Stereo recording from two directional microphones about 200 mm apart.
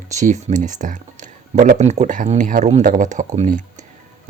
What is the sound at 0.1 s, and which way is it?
Speech, 35° right (ahead or behind).